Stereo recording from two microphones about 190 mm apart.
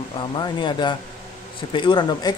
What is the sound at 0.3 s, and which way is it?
Speech, 25° left (ahead or behind).